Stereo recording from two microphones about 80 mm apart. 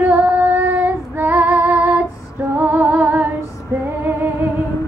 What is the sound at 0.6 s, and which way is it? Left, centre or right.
Female singing, right.